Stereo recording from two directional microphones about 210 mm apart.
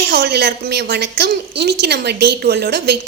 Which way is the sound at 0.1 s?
50° right (ahead or behind).